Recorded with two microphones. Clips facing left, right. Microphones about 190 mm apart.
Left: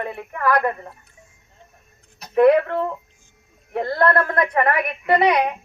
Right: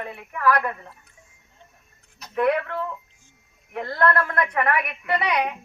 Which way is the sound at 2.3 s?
35° left (ahead or behind).